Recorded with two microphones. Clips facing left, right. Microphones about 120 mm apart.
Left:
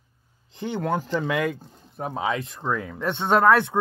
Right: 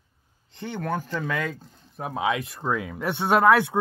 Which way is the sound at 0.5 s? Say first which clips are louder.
Left 3 dB; 15° left (ahead or behind).